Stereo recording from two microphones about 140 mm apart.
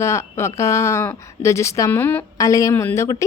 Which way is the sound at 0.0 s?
20° left (ahead or behind).